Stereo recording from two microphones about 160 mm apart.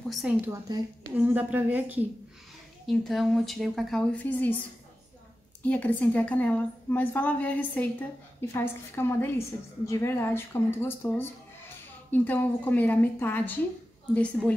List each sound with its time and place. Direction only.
0.1 s a woman's voice: centre (ahead or behind)
0.5 s a woman's voice: 25° right (ahead or behind)
1.1 s a woman's voice: 10° right (ahead or behind)
2.9 s a woman's voice: centre (ahead or behind)
5.6 s a woman's voice: 10° left (ahead or behind)